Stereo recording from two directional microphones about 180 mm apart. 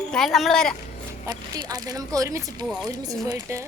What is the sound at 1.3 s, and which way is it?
Speech, 20° right (ahead or behind).